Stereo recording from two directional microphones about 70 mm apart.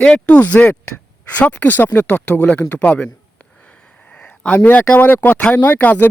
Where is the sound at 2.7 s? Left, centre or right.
Left.